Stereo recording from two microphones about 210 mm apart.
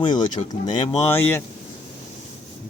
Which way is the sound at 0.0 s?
20° left (ahead or behind).